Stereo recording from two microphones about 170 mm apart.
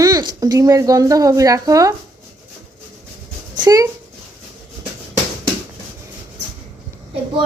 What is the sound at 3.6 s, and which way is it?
Speech, 20° right (ahead or behind).